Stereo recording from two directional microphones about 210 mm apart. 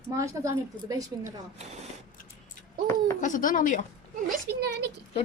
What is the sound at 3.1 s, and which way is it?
Speech, 35° left (ahead or behind).